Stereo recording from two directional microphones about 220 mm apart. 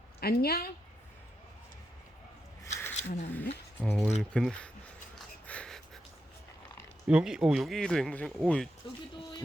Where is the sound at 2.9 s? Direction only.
30° left (ahead or behind).